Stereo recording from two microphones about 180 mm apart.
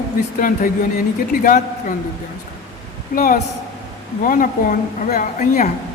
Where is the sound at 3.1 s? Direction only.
50° left (ahead or behind).